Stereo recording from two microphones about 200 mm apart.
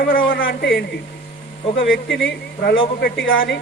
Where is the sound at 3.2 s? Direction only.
70° left (ahead or behind).